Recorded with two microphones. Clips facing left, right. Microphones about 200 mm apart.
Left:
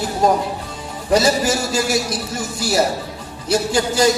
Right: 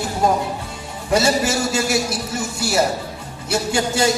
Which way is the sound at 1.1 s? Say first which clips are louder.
Left 2 dB; 25° right (ahead or behind).